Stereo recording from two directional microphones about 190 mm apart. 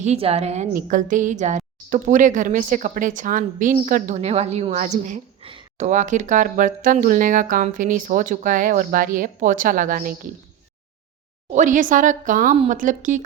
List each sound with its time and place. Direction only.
0.0 s a woman's voice: 35° right (ahead or behind)
5.4 s speech: 25° right (ahead or behind); by 10.2 s 45° right (ahead or behind)
11.5 s speech: 40° right (ahead or behind)